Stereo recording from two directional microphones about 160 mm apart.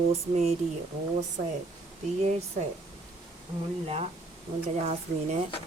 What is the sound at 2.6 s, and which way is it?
Speech, 55° right (ahead or behind).